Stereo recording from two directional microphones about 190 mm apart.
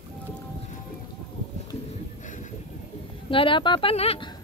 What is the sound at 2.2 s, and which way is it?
Vehicle, 40° left (ahead or behind).